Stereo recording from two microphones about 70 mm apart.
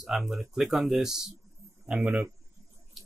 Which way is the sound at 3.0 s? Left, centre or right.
Centre.